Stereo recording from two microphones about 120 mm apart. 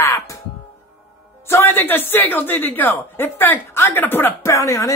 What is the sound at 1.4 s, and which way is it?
Speech, 20° left (ahead or behind).